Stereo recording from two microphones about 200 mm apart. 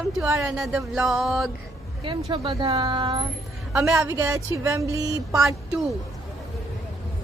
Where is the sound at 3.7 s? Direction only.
5° right (ahead or behind).